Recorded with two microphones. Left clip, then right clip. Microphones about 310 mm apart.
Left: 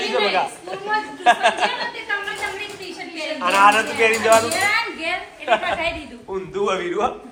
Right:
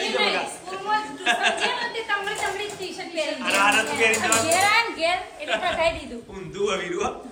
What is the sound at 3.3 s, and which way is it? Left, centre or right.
A man's voice, centre.